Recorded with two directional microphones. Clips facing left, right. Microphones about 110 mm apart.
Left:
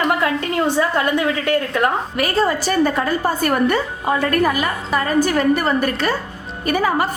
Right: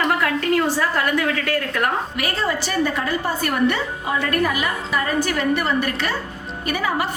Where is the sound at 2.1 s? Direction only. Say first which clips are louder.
Left 5 dB; 40° left (ahead or behind).